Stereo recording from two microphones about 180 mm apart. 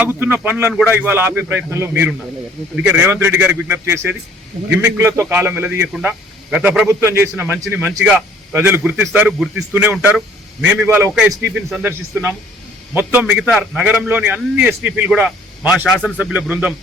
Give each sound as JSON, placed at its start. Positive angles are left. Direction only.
{"t": 0.0, "sound": "a man's voice", "side_deg": -10}